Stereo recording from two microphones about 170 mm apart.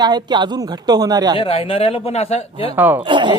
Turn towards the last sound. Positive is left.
turn(degrees=-30)  # may be behind; listen again after turning